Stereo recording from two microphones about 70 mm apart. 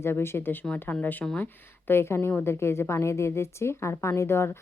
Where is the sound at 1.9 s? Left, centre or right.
Left.